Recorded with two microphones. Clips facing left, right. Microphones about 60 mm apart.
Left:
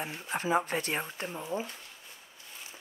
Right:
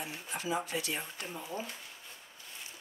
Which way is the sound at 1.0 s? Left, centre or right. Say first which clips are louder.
Left 4 dB; left.